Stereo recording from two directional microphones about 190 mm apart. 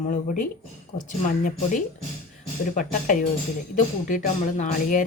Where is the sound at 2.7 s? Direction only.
45° left (ahead or behind).